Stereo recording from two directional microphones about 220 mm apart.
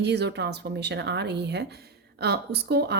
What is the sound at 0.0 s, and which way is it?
Speech, 50° right (ahead or behind).